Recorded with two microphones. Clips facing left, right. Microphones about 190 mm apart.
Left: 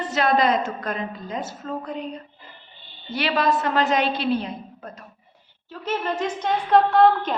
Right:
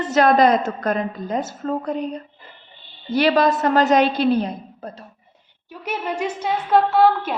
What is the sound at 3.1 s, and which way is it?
A woman's voice, 40° right (ahead or behind).